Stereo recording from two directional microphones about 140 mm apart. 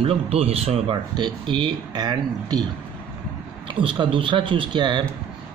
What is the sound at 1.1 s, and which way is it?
A man's voice, 35° right (ahead or behind).